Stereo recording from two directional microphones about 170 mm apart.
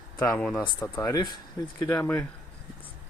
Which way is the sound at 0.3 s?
10° left (ahead or behind).